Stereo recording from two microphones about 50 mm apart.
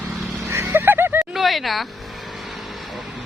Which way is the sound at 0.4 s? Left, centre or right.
Right.